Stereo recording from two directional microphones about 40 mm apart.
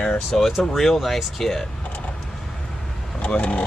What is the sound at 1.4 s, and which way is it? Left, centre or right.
Cutlery, centre.